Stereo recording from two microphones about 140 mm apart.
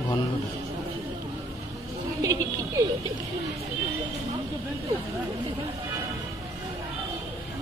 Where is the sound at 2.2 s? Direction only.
25° right (ahead or behind).